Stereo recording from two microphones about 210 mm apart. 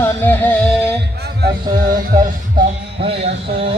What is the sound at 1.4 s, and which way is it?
Speech, 50° right (ahead or behind).